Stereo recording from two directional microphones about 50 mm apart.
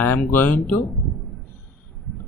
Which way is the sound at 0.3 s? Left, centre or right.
Left.